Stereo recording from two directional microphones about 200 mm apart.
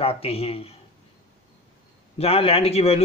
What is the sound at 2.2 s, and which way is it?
Speech, 30° left (ahead or behind).